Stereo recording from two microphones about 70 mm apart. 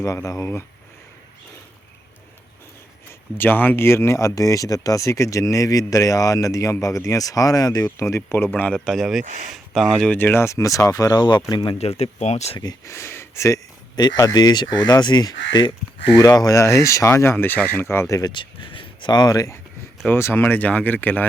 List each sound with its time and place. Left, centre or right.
0.0 s speech: left
3.3 s speech: left
7.9 s speech: left
8.4 s speech: left
8.7 s speech: centre
9.0 s speech: centre
10.2 s speech: left
12.8 s speech: left
13.9 s speech: left
16.1 s speech: left
17.3 s speech: left
18.1 s speech: left
19.0 s speech: left
20.1 s speech: left